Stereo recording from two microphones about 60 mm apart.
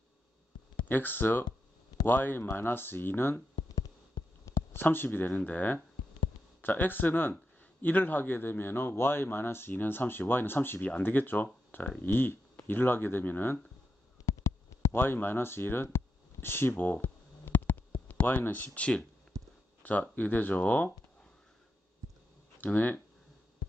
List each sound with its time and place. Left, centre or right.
0.8 s speech: left
4.7 s speech: left
5.3 s speech: left
14.2 s a sound: left
18.4 s speech: left
19.3 s a sound: right
19.8 s speech: left
22.6 s speech: left